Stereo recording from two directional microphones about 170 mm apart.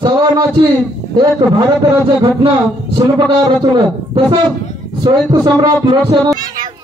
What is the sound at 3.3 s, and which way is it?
Speech, 25° right (ahead or behind).